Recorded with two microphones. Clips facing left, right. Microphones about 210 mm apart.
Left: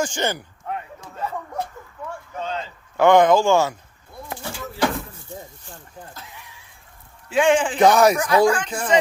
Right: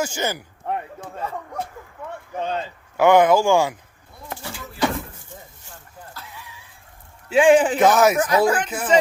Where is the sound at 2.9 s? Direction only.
10° right (ahead or behind).